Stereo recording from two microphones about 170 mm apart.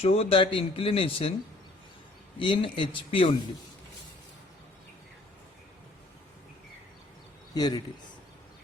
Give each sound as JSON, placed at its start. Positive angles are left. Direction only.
{"t": 0.0, "sound": "speech", "side_deg": 35}
{"t": 2.4, "sound": "speech", "side_deg": 30}
{"t": 7.5, "sound": "a man's voice", "side_deg": 25}